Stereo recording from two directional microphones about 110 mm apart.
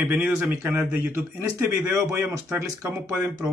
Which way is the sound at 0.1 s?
15° right (ahead or behind).